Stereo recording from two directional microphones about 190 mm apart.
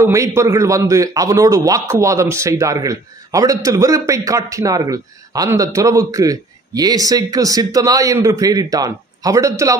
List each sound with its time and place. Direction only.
0.0 s a man's voice: 15° right (ahead or behind)